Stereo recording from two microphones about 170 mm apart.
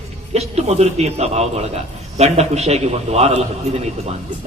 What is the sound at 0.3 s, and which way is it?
A man's voice, 40° right (ahead or behind).